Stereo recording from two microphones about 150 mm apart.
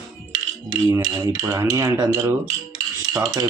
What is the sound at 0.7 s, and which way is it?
Speech, 25° right (ahead or behind).